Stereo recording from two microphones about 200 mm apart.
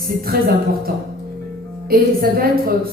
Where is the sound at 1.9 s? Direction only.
45° right (ahead or behind).